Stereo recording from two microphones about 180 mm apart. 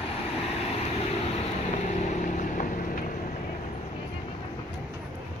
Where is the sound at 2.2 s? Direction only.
45° left (ahead or behind).